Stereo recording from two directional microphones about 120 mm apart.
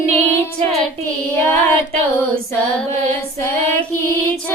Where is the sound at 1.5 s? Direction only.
20° left (ahead or behind).